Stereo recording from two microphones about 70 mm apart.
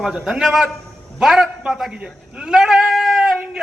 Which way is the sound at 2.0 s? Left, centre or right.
Centre.